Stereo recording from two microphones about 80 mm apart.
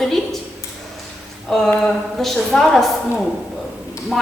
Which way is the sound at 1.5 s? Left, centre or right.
Centre.